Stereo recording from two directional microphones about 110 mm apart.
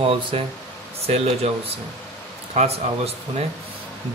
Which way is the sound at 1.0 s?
70° right (ahead or behind).